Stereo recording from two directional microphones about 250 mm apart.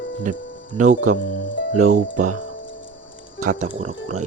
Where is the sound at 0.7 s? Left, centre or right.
Right.